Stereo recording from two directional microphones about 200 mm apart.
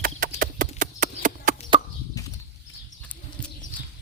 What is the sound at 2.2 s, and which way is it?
Horse, 15° left (ahead or behind).